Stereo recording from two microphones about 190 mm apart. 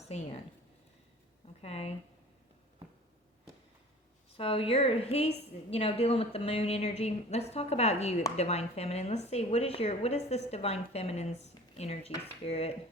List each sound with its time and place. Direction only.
0.0 s a sound: 35° left (ahead or behind)
1.6 s speech: 30° left (ahead or behind)
4.4 s a woman's voice: 30° left (ahead or behind)